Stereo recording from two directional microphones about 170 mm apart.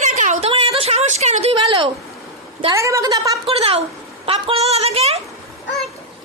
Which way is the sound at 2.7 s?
20° right (ahead or behind).